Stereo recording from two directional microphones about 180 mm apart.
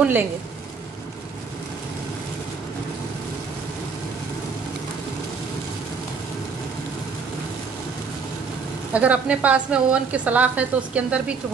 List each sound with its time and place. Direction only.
0.0 s a woman's voice: 10° right (ahead or behind)
8.9 s a woman's voice: 5° right (ahead or behind)